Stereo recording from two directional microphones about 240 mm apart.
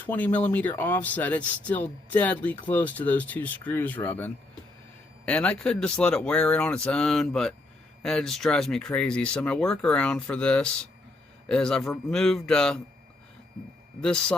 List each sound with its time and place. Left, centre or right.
0.0 s speech: centre
14.0 s speech: centre